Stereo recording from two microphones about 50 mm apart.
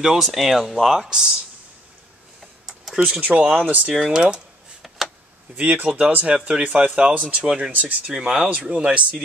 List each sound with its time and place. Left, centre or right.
0.0 s speech: centre
2.6 s typing: centre
3.2 s speech: right
3.4 s speech: centre
4.8 s tick: centre
5.9 s speech: right
7.4 s speech: centre